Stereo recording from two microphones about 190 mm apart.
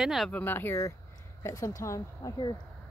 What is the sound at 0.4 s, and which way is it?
Speech, 10° left (ahead or behind).